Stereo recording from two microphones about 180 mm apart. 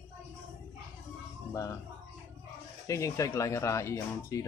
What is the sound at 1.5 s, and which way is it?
Speech, 15° left (ahead or behind).